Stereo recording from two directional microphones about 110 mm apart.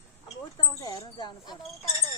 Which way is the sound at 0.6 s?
40° left (ahead or behind).